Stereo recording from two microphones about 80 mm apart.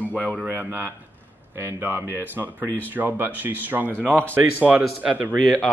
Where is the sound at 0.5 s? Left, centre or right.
Right.